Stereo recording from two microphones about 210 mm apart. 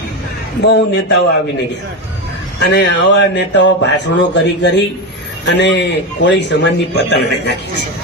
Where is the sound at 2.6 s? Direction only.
55° left (ahead or behind).